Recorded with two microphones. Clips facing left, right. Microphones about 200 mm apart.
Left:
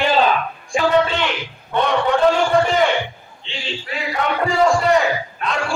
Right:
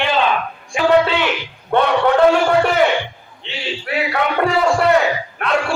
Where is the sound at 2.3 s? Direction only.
70° right (ahead or behind).